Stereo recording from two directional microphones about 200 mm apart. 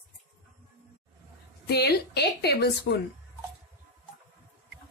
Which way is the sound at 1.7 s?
55° left (ahead or behind).